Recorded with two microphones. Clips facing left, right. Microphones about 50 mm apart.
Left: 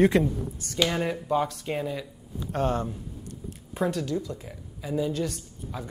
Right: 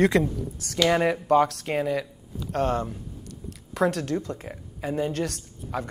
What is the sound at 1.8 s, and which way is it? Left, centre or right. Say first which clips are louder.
Speech: right 5 dB; right.